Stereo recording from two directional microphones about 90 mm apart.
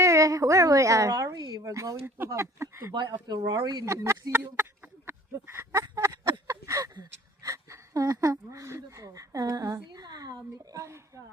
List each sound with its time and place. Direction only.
0.0 s a sound: 35° right (ahead or behind)
1.5 s speech: 40° right (ahead or behind)
2.0 s speech: 25° right (ahead or behind)
2.9 s speech: 55° right (ahead or behind)
3.8 s speech: 30° right (ahead or behind)
6.5 s a sound: 35° right (ahead or behind)
7.4 s speech: 40° right (ahead or behind)